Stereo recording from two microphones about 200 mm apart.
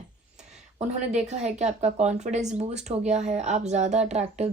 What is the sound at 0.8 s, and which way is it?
A woman's voice, 35° right (ahead or behind).